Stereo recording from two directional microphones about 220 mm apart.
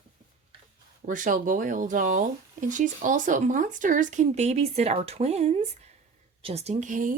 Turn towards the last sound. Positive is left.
turn(degrees=-35)  # may be behind; listen again after turning